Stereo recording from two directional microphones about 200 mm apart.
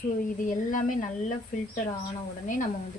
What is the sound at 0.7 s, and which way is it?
Speech, 40° left (ahead or behind).